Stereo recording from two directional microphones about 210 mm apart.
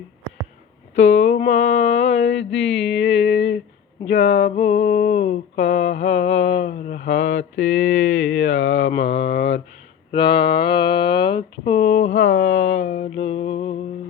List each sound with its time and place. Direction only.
0.9 s a sound: 35° left (ahead or behind)
2.2 s mantra: 55° left (ahead or behind)
3.0 s speech: 30° left (ahead or behind)
4.3 s mantra: 55° left (ahead or behind)
4.5 s a sound: 30° left (ahead or behind)
5.5 s mantra: 55° left (ahead or behind)
6.0 s mantra: 30° left (ahead or behind)
7.1 s mantra: 60° left (ahead or behind)
8.9 s speech: 30° left (ahead or behind)
12.4 s speech: 60° left (ahead or behind)
12.9 s mantra: 30° left (ahead or behind)